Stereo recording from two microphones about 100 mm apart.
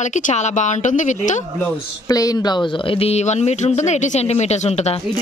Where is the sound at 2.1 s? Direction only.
35° left (ahead or behind); by 5.0 s 90° left.